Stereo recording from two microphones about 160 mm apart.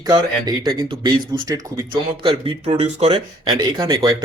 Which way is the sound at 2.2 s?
35° right (ahead or behind).